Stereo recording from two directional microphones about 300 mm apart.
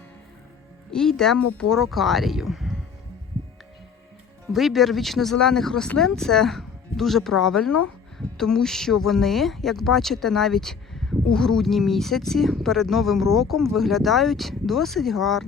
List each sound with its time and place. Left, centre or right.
0.9 s speech: centre
4.5 s speech: centre